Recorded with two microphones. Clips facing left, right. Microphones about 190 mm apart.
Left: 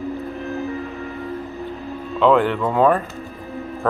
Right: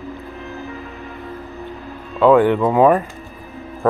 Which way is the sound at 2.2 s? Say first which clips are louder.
Right 4 dB; 10° right (ahead or behind).